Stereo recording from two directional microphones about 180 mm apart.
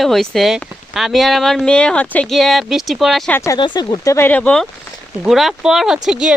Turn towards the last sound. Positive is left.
turn(degrees=-5)  # may be behind; listen again after turning